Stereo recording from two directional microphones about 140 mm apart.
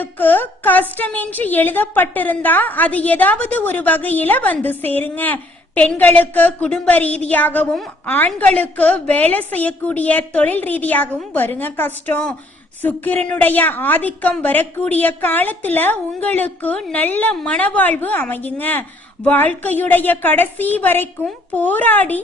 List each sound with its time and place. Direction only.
0.0 s a woman's voice: 15° left (ahead or behind)